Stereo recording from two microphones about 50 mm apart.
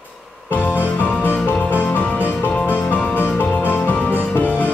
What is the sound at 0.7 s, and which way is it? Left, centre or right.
Music, left.